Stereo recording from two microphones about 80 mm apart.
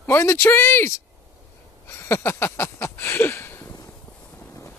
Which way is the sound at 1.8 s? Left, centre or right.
Left.